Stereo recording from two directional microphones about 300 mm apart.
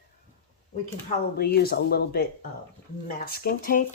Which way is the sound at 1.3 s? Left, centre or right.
Left.